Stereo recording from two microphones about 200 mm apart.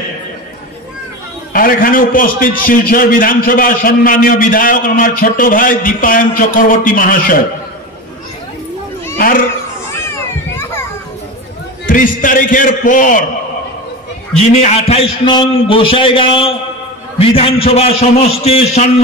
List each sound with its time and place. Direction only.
1.5 s a man's voice: 45° left (ahead or behind)
9.8 s children playing: 10° left (ahead or behind)
11.8 s a man's voice: 40° left (ahead or behind)
14.4 s a man's voice: 35° left (ahead or behind)